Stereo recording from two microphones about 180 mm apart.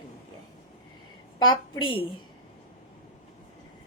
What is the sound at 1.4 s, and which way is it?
Speech, 25° left (ahead or behind).